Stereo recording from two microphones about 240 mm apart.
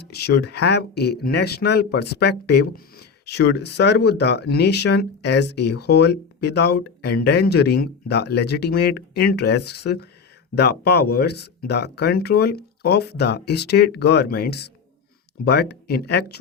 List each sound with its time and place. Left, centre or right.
0.0 s speech: left